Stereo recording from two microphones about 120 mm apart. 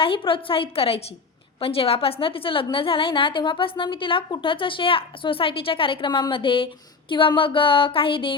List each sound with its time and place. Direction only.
0.0 s a woman's voice: 45° left (ahead or behind)